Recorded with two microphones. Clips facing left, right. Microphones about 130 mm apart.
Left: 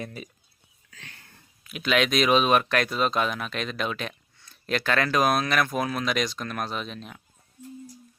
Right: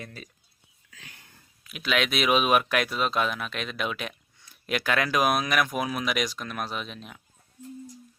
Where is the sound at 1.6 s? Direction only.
Centre (ahead or behind).